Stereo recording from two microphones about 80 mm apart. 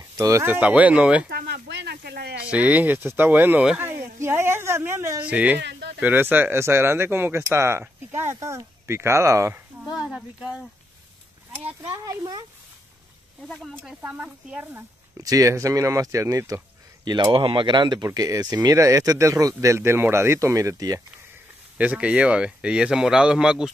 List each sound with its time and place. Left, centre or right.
0.2 s speech: right
0.5 s speech: centre
2.5 s speech: centre
3.7 s a sound: right
5.2 s speech: centre; by 9.6 s right
9.9 s speech: centre
11.5 s speech: right
12.0 s speech: right
13.5 s speech: centre
14.0 s speech: centre
15.1 s speech: right
17.0 s speech: right
18.0 s speech: right
21.7 s speech: centre